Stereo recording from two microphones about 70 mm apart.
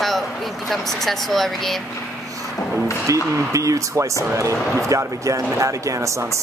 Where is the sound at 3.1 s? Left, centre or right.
Right.